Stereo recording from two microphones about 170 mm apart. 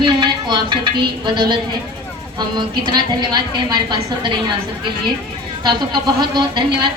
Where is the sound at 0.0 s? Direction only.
25° right (ahead or behind).